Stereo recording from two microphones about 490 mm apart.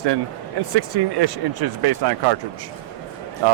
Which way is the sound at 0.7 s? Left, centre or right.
Right.